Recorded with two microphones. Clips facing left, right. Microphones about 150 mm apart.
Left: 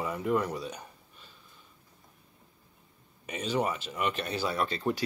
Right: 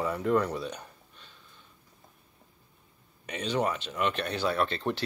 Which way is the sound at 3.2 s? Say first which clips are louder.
Right 1 dB; 5° left (ahead or behind).